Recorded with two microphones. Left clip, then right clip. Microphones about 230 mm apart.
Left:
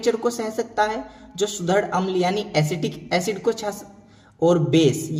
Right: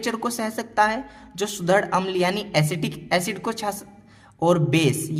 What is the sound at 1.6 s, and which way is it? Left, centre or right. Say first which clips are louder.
A man's voice: right 2 dB; right.